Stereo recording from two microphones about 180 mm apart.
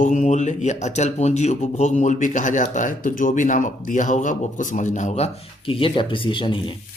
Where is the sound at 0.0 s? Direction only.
45° left (ahead or behind).